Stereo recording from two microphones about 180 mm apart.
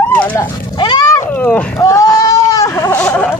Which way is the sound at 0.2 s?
10° left (ahead or behind).